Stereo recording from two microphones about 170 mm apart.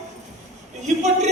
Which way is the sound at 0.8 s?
45° right (ahead or behind).